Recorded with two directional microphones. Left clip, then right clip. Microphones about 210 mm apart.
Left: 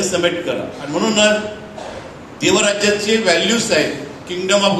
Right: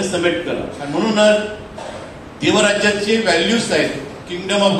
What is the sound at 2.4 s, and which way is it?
A man's voice, 50° left (ahead or behind).